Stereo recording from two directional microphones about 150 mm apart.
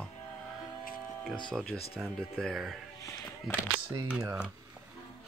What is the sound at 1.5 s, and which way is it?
Speech, 5° left (ahead or behind).